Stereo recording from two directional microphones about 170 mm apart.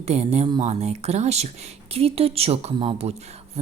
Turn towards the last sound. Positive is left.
turn(degrees=-40)  # may be behind; listen again after turning